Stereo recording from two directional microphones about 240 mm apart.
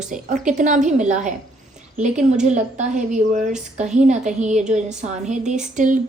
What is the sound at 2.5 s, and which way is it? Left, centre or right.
A woman's voice, right.